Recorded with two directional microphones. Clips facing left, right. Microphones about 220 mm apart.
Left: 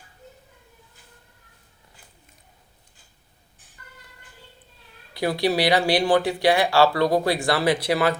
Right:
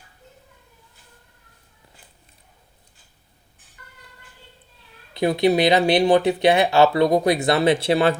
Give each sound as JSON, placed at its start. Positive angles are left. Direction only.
{"t": 5.1, "sound": "speech", "side_deg": -20}